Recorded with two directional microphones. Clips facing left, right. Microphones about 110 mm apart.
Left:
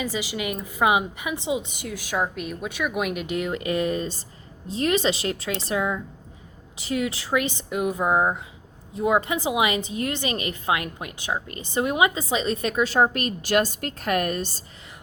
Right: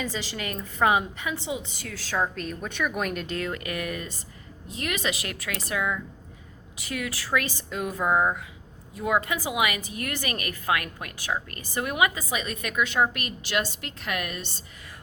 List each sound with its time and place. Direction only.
0.0 s a woman's voice: 10° left (ahead or behind); by 14.6 s 40° left (ahead or behind)